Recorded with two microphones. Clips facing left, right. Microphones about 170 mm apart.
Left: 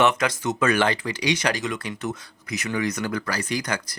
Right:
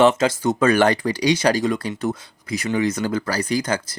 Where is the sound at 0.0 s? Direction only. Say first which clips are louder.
Right 5 dB; 25° right (ahead or behind).